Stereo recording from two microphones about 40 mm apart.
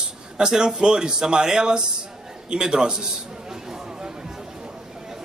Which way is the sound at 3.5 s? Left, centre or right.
Centre.